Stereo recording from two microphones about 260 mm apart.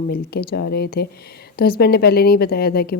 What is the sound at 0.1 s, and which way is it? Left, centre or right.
A woman's voice, left.